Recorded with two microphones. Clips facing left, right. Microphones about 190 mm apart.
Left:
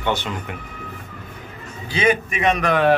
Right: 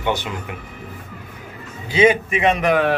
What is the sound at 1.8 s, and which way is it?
Speech, 25° right (ahead or behind).